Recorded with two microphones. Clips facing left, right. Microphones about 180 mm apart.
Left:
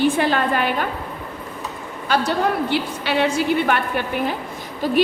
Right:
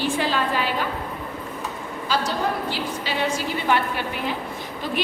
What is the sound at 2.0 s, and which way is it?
A man's voice, 60° left (ahead or behind).